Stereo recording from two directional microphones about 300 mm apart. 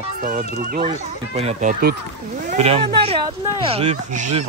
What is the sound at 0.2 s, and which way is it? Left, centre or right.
Speech, right.